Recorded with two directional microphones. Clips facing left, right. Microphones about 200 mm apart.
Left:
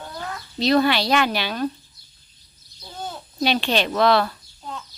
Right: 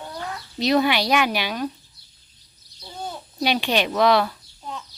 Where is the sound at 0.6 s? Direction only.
15° right (ahead or behind).